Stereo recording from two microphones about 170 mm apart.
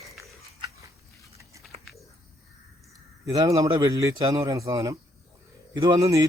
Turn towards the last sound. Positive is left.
turn(degrees=-20)  # may be behind; listen again after turning